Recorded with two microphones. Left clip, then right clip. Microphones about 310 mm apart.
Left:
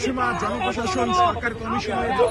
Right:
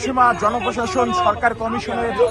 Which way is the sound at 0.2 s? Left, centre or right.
Centre.